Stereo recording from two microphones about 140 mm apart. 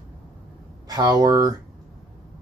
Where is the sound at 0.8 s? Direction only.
30° right (ahead or behind).